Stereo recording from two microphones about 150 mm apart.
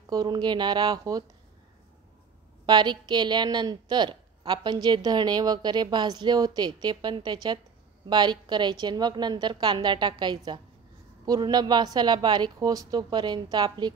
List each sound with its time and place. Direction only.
0.1 s a woman's voice: 25° right (ahead or behind)
2.6 s a woman's voice: 30° right (ahead or behind)